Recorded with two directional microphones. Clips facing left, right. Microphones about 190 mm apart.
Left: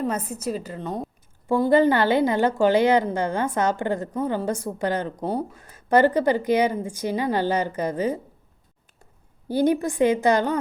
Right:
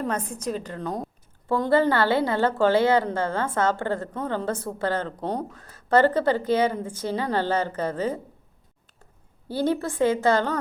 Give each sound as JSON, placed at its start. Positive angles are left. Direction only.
{"t": 0.0, "sound": "a woman's voice", "side_deg": 5}
{"t": 1.5, "sound": "a woman's voice", "side_deg": 15}
{"t": 9.5, "sound": "a woman's voice", "side_deg": 15}